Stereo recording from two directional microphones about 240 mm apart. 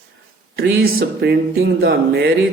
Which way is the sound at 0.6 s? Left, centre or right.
Right.